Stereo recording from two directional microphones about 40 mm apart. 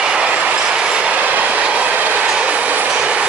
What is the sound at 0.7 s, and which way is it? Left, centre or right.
Train, right.